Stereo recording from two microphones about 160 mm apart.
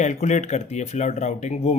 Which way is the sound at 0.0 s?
45° left (ahead or behind).